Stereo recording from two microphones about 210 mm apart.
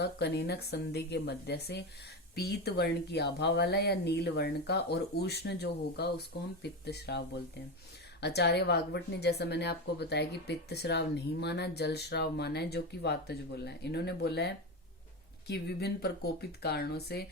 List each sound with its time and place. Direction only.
0.0 s a woman's voice: 50° left (ahead or behind)
8.2 s a woman's voice: 50° left (ahead or behind)